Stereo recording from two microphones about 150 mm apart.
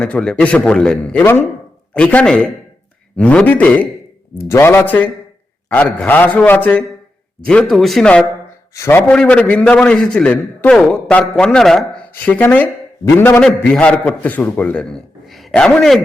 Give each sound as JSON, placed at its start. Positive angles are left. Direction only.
{"t": 0.0, "sound": "a man's voice", "side_deg": 5}
{"t": 8.7, "sound": "a man's voice", "side_deg": 15}